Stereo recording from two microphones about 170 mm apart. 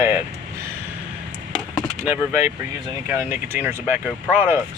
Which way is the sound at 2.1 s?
15° right (ahead or behind).